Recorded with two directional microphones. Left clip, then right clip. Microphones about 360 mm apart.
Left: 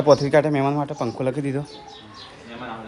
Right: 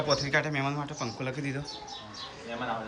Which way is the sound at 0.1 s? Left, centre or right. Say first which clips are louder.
Left 13 dB; centre.